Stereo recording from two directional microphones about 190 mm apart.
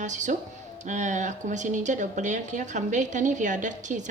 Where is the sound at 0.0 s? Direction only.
40° right (ahead or behind).